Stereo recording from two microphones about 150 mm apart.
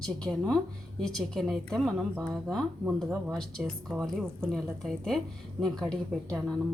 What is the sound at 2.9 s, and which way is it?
A woman's voice, 5° left (ahead or behind).